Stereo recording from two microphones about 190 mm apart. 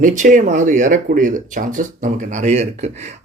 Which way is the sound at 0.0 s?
40° right (ahead or behind).